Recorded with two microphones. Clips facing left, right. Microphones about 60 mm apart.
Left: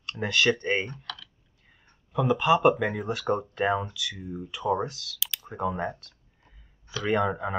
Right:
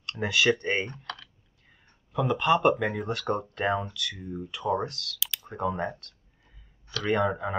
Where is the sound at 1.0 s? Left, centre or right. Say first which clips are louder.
Right 1 dB; right.